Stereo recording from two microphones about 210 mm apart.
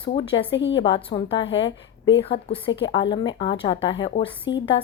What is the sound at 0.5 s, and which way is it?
Speech, 60° left (ahead or behind).